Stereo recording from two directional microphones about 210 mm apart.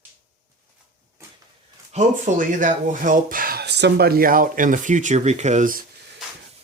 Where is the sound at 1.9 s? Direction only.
35° right (ahead or behind).